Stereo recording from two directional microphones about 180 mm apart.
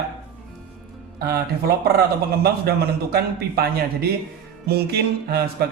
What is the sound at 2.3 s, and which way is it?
Speech, 60° right (ahead or behind).